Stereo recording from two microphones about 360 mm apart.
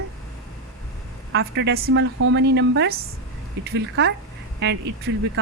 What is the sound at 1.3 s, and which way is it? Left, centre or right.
Speech, right.